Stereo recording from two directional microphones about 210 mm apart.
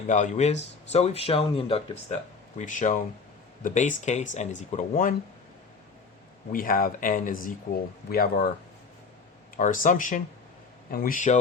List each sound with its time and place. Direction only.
0.1 s speech: 35° left (ahead or behind)
6.5 s speech: 40° left (ahead or behind)
9.6 s speech: 40° left (ahead or behind)